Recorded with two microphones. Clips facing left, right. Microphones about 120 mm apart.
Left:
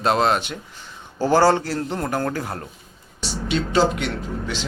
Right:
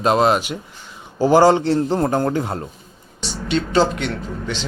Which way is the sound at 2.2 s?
20° right (ahead or behind).